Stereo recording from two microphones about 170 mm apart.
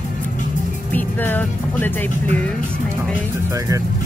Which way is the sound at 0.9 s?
10° left (ahead or behind).